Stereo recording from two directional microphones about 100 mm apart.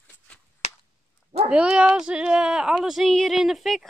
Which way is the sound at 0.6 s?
90° left.